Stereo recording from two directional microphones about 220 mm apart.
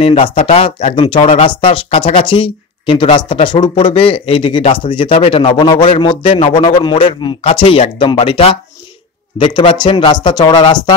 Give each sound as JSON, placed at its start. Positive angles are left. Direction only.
{"t": 0.0, "sound": "speech", "side_deg": 30}